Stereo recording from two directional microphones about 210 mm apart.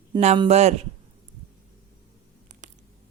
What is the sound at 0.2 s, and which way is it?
Speech, 30° right (ahead or behind).